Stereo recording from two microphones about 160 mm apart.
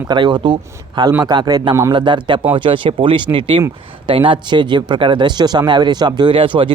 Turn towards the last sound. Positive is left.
turn(degrees=-30)  # may be behind; listen again after turning